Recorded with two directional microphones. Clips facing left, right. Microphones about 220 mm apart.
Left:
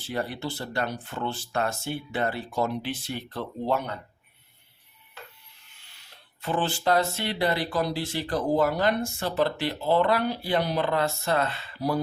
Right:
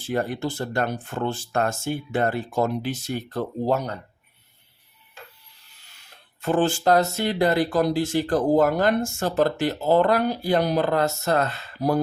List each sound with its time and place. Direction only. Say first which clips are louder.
0.0 s speech: right 5 dB; 50° right (ahead or behind)
5.7 s a sound: right 1 dB; 40° right (ahead or behind)
6.4 s speech: right 6 dB; 45° right (ahead or behind)